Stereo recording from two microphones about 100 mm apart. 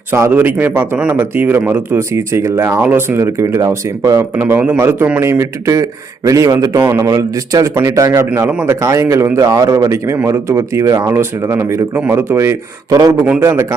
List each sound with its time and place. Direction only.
0.1 s speech: 20° right (ahead or behind)
4.4 s a man's voice: 20° right (ahead or behind)
5.2 s speech: 30° right (ahead or behind)
6.8 s speech: 25° right (ahead or behind)
7.1 s speech: 35° right (ahead or behind)
12.9 s speech: 40° right (ahead or behind)
13.4 s speech: 30° right (ahead or behind)